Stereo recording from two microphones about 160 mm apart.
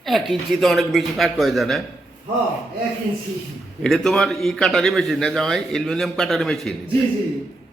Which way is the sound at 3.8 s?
5° left (ahead or behind).